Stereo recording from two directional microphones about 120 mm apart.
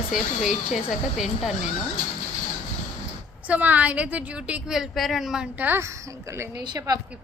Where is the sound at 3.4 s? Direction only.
10° right (ahead or behind).